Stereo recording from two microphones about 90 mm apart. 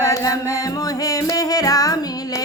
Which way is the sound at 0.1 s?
40° left (ahead or behind).